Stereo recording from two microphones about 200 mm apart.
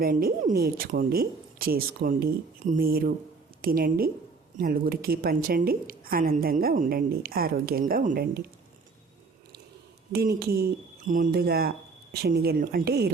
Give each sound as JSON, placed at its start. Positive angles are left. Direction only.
{"t": 0.0, "sound": "a woman's voice", "side_deg": -45}
{"t": 10.1, "sound": "a woman's voice", "side_deg": -50}